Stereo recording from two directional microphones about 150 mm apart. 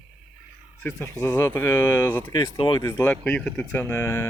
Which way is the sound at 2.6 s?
30° left (ahead or behind).